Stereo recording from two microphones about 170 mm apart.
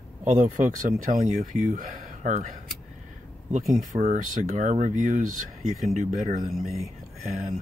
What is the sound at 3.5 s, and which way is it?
Speech, 45° right (ahead or behind).